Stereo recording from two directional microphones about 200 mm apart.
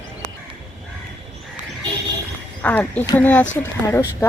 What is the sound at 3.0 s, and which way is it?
Speech, 20° left (ahead or behind).